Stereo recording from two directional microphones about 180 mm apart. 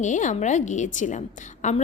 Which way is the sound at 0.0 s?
45° left (ahead or behind).